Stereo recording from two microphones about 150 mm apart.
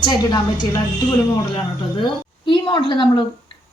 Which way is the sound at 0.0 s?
30° left (ahead or behind).